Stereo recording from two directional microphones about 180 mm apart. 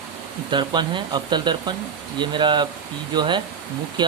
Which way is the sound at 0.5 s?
25° right (ahead or behind).